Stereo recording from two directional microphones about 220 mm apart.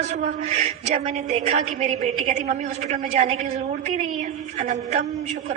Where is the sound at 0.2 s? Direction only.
30° right (ahead or behind).